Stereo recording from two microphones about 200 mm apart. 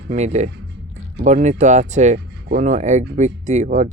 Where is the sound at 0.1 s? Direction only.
35° right (ahead or behind).